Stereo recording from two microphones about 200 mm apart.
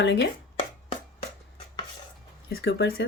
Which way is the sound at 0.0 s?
60° left (ahead or behind).